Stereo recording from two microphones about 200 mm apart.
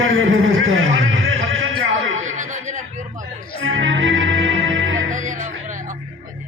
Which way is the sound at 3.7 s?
70° right (ahead or behind).